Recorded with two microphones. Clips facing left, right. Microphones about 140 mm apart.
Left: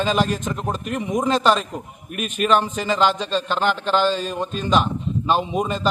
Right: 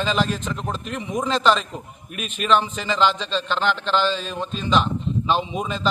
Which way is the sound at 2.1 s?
50° left (ahead or behind).